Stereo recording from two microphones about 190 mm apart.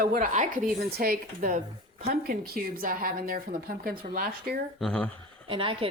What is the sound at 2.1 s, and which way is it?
A woman's voice, 50° right (ahead or behind).